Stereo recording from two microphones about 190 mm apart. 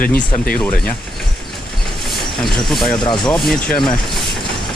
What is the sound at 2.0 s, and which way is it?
Vehicle, centre (ahead or behind).